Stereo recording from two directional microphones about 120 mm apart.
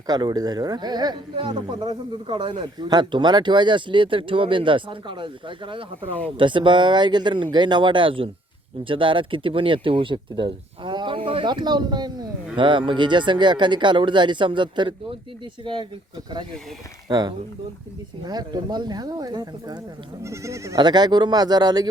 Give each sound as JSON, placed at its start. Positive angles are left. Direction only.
{"t": 0.1, "sound": "speech", "side_deg": -35}
{"t": 17.1, "sound": "speech", "side_deg": -35}
{"t": 20.7, "sound": "speech", "side_deg": -35}